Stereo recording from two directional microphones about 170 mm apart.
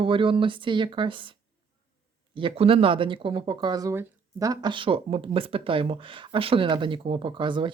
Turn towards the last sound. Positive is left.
turn(degrees=-30)  # may be behind; listen again after turning